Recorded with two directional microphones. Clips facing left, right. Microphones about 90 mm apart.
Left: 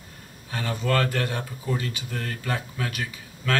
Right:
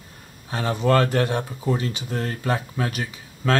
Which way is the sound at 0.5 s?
30° right (ahead or behind).